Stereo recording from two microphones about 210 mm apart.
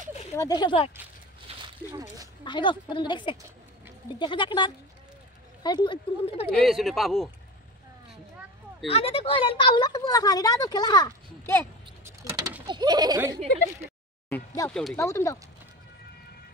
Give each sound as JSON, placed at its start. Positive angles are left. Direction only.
{"t": 0.4, "sound": "a woman's voice", "side_deg": 20}
{"t": 1.5, "sound": "a sound", "side_deg": -30}
{"t": 2.4, "sound": "a woman's voice", "side_deg": 20}
{"t": 6.6, "sound": "speech", "side_deg": 0}
{"t": 8.8, "sound": "a woman's voice", "side_deg": 25}
{"t": 12.3, "sound": "a sound", "side_deg": -20}
{"t": 12.6, "sound": "speech", "side_deg": -20}
{"t": 14.3, "sound": "speech", "side_deg": 15}
{"t": 14.7, "sound": "speech", "side_deg": 0}
{"t": 15.0, "sound": "speech", "side_deg": 15}